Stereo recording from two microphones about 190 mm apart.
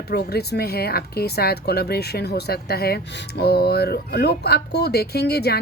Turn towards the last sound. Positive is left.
turn(degrees=60)  # may be behind; listen again after turning